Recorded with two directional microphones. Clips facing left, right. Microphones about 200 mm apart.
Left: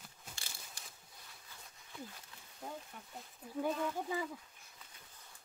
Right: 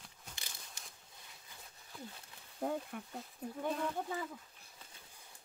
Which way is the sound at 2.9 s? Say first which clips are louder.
Right 9 dB; 60° right (ahead or behind).